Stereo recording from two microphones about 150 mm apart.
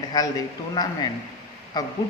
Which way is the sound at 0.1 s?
25° left (ahead or behind).